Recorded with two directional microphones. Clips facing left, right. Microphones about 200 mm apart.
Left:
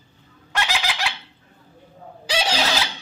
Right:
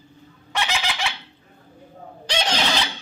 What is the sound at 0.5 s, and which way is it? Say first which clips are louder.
Fowl: even; centre (ahead or behind).